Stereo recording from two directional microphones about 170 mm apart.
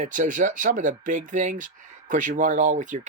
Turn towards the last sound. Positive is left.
turn(degrees=-45)  # may be behind; listen again after turning